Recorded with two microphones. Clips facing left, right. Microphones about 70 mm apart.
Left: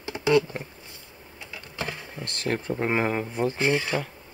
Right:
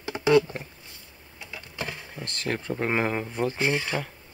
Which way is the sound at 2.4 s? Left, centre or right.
Left.